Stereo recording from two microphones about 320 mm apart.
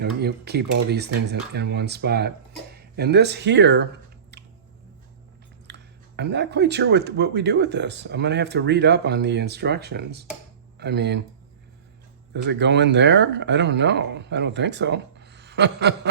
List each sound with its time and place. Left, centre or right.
0.0 s speech: right
5.6 s speech: right
12.3 s speech: right